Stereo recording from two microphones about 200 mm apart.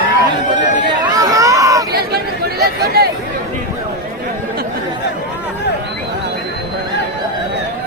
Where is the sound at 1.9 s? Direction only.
50° right (ahead or behind).